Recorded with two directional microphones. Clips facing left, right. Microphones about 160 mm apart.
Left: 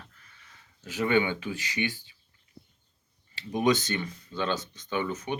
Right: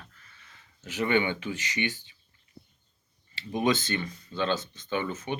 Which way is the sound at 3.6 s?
15° left (ahead or behind).